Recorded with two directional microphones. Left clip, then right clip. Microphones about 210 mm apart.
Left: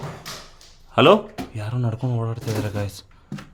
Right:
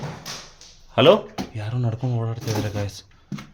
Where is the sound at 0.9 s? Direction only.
10° left (ahead or behind).